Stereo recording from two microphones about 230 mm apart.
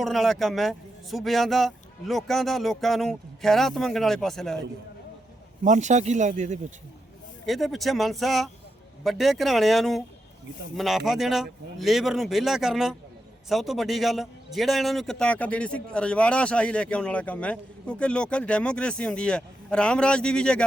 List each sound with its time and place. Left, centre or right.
0.0 s a man's voice: centre
5.6 s speech: right
7.4 s a man's voice: centre